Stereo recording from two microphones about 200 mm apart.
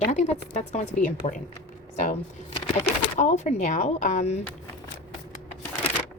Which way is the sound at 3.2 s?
35° left (ahead or behind).